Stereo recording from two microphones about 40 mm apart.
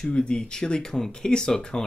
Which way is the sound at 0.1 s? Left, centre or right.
Left.